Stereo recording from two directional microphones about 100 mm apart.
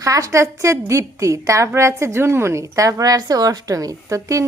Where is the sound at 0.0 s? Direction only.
35° right (ahead or behind).